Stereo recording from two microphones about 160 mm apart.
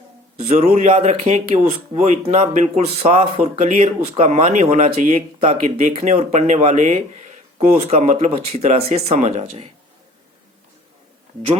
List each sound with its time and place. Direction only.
0.4 s speech: 40° right (ahead or behind)